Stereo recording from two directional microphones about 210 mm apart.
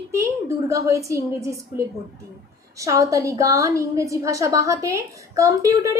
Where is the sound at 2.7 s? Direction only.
15° right (ahead or behind).